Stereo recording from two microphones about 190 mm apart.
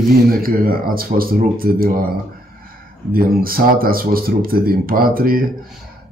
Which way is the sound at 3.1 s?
50° right (ahead or behind).